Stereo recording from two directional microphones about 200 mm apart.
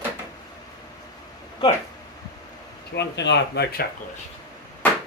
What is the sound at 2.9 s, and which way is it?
Speech, 60° left (ahead or behind).